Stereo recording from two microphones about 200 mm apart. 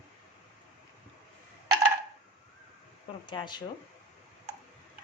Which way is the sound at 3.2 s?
25° left (ahead or behind).